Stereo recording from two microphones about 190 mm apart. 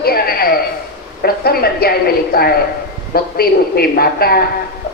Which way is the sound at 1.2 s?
55° left (ahead or behind).